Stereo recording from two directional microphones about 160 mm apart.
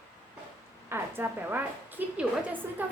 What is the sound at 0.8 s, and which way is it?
A woman's voice, 15° right (ahead or behind).